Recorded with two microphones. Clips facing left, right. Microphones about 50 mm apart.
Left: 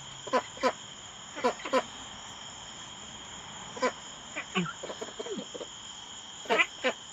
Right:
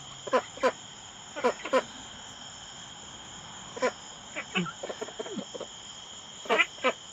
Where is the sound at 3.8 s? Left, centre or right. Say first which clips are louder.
Right 1 dB; right.